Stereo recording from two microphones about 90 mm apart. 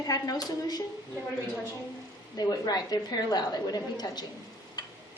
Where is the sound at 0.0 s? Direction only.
45° left (ahead or behind).